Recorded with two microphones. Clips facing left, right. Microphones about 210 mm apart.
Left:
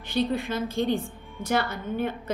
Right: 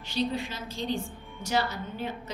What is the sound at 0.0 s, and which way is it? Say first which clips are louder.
A woman's voice: left 4 dB; 55° left (ahead or behind).